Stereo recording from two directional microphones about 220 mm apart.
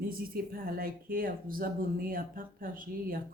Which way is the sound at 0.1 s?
40° right (ahead or behind).